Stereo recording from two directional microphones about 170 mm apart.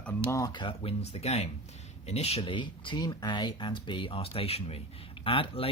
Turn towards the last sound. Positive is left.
turn(degrees=35)  # may be behind; listen again after turning